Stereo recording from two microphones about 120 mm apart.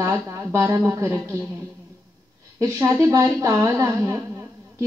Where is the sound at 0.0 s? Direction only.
25° right (ahead or behind).